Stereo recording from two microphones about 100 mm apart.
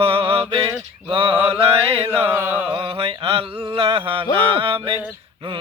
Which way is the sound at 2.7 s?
65° right (ahead or behind).